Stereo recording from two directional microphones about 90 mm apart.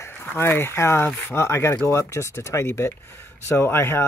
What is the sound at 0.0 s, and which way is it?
Speech, 25° left (ahead or behind).